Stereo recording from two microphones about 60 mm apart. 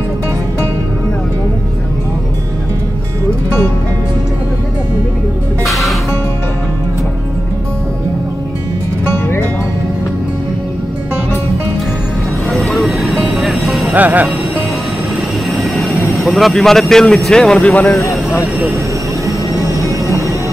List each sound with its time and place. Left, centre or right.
5.7 s music: centre
12.4 s music: centre
13.9 s speech: right
15.5 s vehicle: centre; by 17.9 s left
19.2 s vehicle: right